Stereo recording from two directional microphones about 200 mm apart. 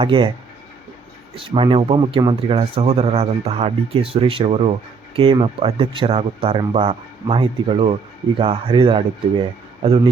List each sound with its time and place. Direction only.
0.0 s speech: 25° right (ahead or behind)
1.4 s speech: 25° right (ahead or behind)